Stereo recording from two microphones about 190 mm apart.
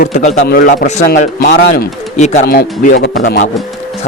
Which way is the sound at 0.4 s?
50° left (ahead or behind).